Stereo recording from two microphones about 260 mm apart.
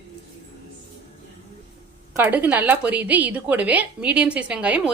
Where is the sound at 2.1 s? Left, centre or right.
Centre.